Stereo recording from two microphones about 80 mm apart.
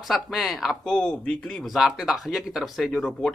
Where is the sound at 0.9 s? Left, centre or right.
Centre.